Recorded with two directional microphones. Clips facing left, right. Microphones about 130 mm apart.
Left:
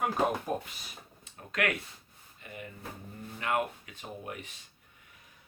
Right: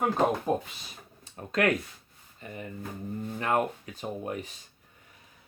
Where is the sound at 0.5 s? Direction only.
25° right (ahead or behind).